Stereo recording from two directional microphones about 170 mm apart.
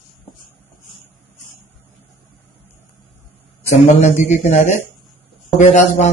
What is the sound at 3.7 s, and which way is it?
Speech, 40° left (ahead or behind).